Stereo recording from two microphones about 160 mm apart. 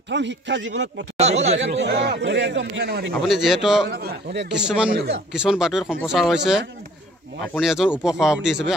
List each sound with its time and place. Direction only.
0.1 s speech: 90° right
1.1 s speech: 45° right (ahead or behind)
1.9 s speech: 90° right
3.2 s speech: centre (ahead or behind)
3.9 s a man's voice: 85° right
4.6 s speech: 5° right (ahead or behind)
7.6 s speech: 5° right (ahead or behind)